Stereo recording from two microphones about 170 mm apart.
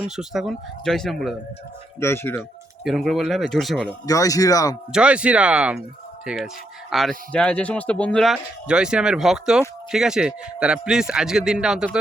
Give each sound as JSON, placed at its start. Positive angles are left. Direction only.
{"t": 0.0, "sound": "speech", "side_deg": 0}
{"t": 2.0, "sound": "speech", "side_deg": 15}
{"t": 2.8, "sound": "speech", "side_deg": 0}
{"t": 4.0, "sound": "a man's voice", "side_deg": 20}
{"t": 4.9, "sound": "speech", "side_deg": -5}